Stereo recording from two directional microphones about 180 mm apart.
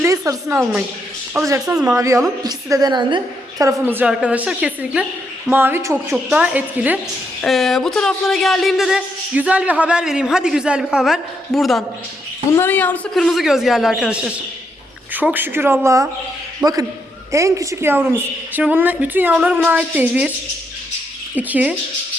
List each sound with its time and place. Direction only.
0.0 s a sound: 20° right (ahead or behind)
0.6 s speech: 5° right (ahead or behind)
1.3 s a woman's voice: 15° right (ahead or behind)
3.6 s a woman's voice: 15° right (ahead or behind)
12.5 s a woman's voice: 10° left (ahead or behind); by 20.3 s 5° right (ahead or behind)
21.3 s a woman's voice: 10° right (ahead or behind)